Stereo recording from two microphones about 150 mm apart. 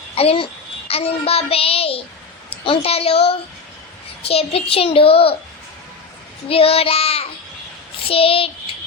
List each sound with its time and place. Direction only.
0.2 s a child's voice: 40° left (ahead or behind)
0.9 s child singing: 40° left (ahead or behind)
2.6 s a child's voice: 40° left (ahead or behind)
6.5 s a child's voice: 40° left (ahead or behind)